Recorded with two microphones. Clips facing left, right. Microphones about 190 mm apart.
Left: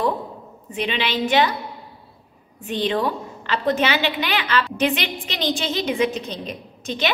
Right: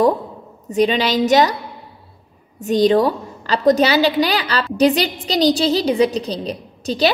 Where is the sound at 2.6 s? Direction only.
40° right (ahead or behind).